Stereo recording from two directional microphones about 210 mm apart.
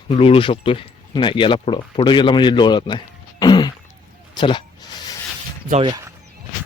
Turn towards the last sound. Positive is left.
turn(degrees=-25)  # may be behind; listen again after turning